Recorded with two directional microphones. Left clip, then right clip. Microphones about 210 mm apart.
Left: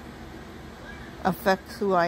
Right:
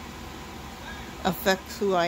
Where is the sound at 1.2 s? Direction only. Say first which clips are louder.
Left 1 dB; centre (ahead or behind).